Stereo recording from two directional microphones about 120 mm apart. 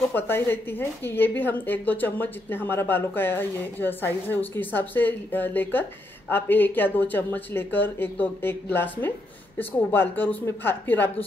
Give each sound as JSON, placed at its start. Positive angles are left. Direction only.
{"t": 0.1, "sound": "a woman's voice", "side_deg": 15}